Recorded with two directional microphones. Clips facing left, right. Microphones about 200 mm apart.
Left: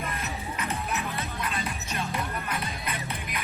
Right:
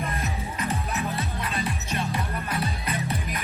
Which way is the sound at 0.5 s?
30° right (ahead or behind).